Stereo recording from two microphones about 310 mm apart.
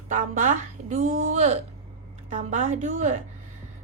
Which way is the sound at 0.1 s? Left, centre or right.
Right.